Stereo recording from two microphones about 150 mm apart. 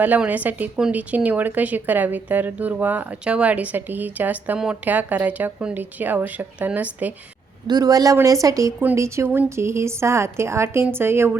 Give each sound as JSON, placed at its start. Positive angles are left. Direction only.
{"t": 0.0, "sound": "speech", "side_deg": -10}
{"t": 7.7, "sound": "speech", "side_deg": -25}